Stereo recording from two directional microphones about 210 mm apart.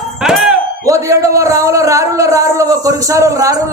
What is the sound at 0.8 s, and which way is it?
A man's voice, 15° right (ahead or behind).